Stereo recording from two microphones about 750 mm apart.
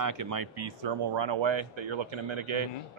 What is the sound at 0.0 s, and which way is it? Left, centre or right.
Speech, right.